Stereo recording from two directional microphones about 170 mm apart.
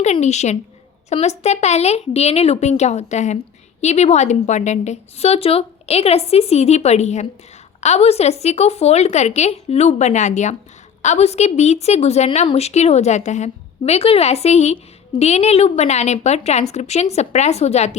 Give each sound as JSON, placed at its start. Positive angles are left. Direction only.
{"t": 0.0, "sound": "a woman's voice", "side_deg": 40}